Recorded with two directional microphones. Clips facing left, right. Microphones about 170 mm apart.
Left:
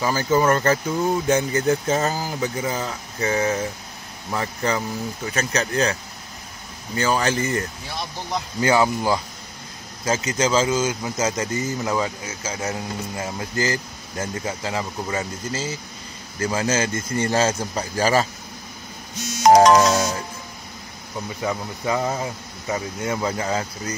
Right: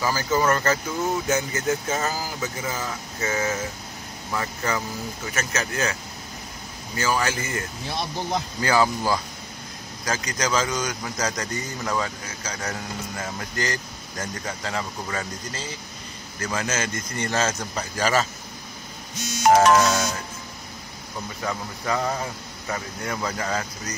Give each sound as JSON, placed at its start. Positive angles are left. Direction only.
{"t": 0.0, "sound": "speech", "side_deg": 25}
{"t": 7.0, "sound": "speech", "side_deg": 30}
{"t": 8.5, "sound": "speech", "side_deg": 25}
{"t": 19.5, "sound": "music", "side_deg": 40}
{"t": 21.4, "sound": "speech", "side_deg": 15}